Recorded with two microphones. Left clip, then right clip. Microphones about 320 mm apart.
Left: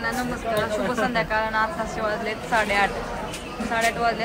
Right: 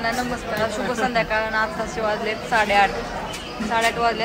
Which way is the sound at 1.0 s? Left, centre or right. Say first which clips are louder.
Right 5 dB; centre.